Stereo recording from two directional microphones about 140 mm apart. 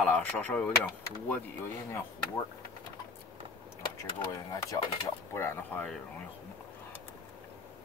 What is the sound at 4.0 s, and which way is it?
Speech, 20° left (ahead or behind).